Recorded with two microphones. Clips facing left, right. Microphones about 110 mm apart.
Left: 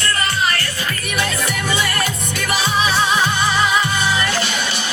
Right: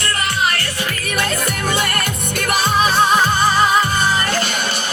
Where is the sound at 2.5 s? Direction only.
50° right (ahead or behind).